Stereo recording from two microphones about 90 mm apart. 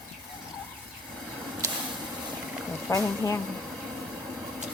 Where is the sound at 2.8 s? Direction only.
30° left (ahead or behind).